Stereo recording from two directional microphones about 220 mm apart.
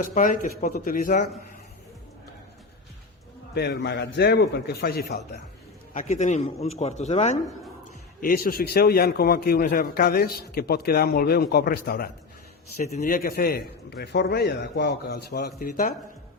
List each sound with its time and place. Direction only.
0.0 s speech: 35° left (ahead or behind)
3.5 s a man's voice: 50° left (ahead or behind)
5.9 s a man's voice: 30° left (ahead or behind)